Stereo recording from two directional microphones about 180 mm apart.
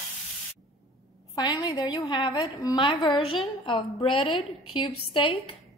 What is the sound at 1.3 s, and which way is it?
A woman's voice, 20° left (ahead or behind).